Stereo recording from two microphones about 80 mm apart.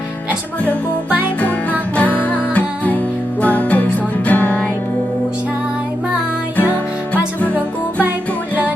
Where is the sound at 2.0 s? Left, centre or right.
Centre.